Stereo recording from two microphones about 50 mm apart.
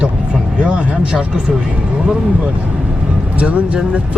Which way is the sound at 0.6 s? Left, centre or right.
Right.